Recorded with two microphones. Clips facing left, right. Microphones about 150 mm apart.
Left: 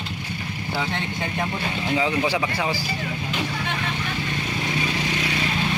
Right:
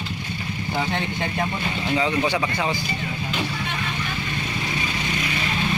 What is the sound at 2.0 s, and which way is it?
Speech, 10° left (ahead or behind).